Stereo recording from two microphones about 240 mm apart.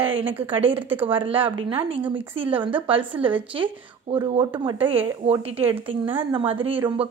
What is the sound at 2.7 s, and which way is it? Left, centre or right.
Speech, right.